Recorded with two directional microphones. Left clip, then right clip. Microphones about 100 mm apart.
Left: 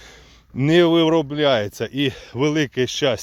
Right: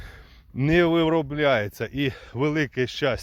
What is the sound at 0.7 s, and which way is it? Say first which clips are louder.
Speech: left 5 dB; 20° left (ahead or behind).